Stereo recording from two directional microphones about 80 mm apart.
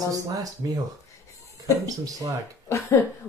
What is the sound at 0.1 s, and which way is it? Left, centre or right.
Speech, right.